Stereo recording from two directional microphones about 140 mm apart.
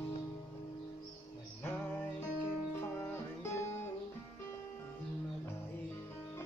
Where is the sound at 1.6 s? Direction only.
10° left (ahead or behind).